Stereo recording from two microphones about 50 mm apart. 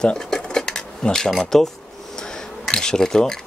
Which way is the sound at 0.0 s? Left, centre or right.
Centre.